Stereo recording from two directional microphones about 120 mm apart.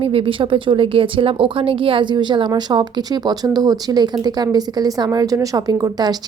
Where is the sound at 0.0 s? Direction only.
50° right (ahead or behind).